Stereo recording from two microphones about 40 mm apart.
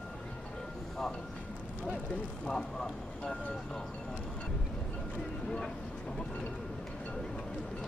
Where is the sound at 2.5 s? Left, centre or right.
Centre.